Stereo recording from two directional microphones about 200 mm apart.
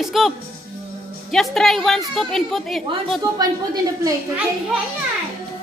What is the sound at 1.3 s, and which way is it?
A woman's voice, centre (ahead or behind).